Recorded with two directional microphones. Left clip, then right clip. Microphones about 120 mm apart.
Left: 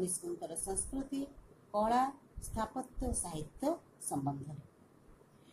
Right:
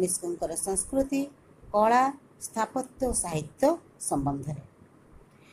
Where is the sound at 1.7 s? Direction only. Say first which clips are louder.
Right 10 dB; 30° right (ahead or behind).